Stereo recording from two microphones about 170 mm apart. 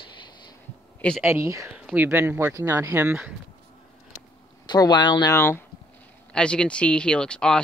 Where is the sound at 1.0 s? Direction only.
5° left (ahead or behind).